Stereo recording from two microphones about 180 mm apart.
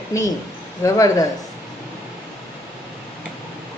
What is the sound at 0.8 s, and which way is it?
Speech, 15° left (ahead or behind).